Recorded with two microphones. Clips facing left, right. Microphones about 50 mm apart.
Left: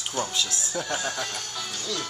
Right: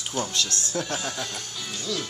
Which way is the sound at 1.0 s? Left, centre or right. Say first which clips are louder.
Left 1 dB; left.